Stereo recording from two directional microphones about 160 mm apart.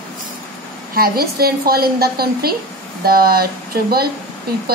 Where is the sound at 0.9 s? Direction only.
70° right (ahead or behind).